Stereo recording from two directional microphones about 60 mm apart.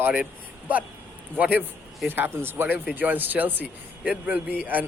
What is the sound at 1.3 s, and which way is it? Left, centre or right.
Speech, right.